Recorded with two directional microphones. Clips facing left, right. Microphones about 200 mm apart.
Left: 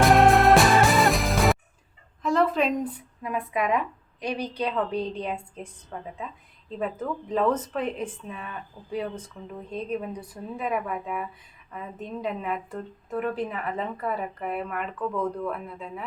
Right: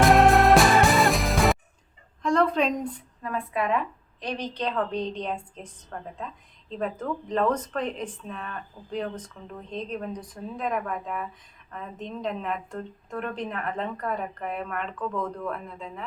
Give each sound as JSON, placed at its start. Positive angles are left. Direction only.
{"t": 0.0, "sound": "music", "side_deg": 0}
{"t": 2.2, "sound": "a sound", "side_deg": 5}
{"t": 3.2, "sound": "a woman's voice", "side_deg": 15}